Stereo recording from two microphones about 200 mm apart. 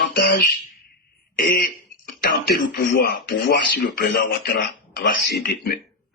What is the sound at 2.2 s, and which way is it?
Speech, 45° left (ahead or behind).